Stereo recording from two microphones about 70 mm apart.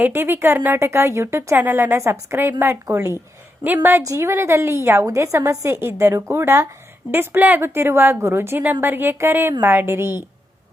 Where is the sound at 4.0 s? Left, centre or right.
Right.